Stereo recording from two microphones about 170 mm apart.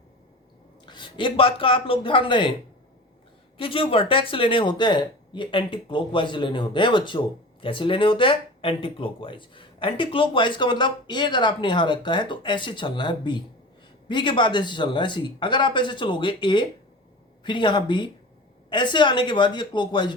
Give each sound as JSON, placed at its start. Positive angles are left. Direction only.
{"t": 0.9, "sound": "speech", "side_deg": 30}
{"t": 3.6, "sound": "speech", "side_deg": 30}